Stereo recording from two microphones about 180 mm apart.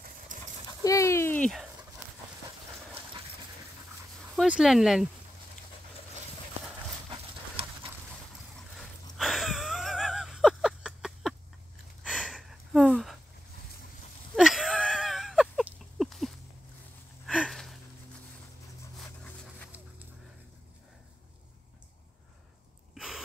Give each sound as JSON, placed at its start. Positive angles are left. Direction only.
{"t": 0.3, "sound": "dog", "side_deg": -45}
{"t": 0.7, "sound": "dog", "side_deg": 20}
{"t": 4.4, "sound": "speech", "side_deg": -5}
{"t": 7.1, "sound": "dog", "side_deg": -30}
{"t": 8.7, "sound": "a sound", "side_deg": 0}
{"t": 14.3, "sound": "wheeze", "side_deg": 0}
{"t": 17.3, "sound": "a sound", "side_deg": 0}
{"t": 18.9, "sound": "dog", "side_deg": 5}
{"t": 22.9, "sound": "a sound", "side_deg": -5}